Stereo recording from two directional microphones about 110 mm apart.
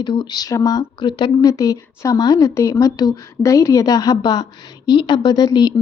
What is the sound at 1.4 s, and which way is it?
Speech, 35° left (ahead or behind).